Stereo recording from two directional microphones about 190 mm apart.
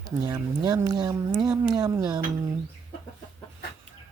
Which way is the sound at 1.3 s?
5° right (ahead or behind).